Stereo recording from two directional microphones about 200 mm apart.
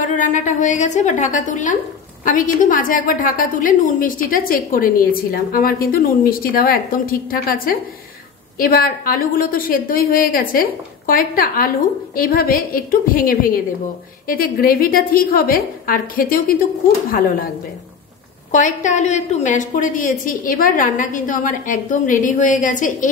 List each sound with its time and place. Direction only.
0.0 s a woman's voice: 40° left (ahead or behind)
18.5 s a woman's voice: 40° left (ahead or behind)